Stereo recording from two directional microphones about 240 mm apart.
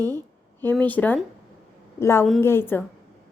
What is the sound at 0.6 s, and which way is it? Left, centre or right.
A woman's voice, centre.